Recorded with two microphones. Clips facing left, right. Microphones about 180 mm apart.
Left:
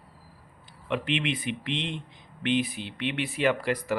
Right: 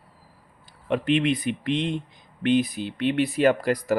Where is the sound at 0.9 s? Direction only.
40° right (ahead or behind).